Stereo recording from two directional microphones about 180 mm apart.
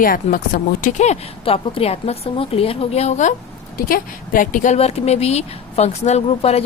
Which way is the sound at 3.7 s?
50° left (ahead or behind).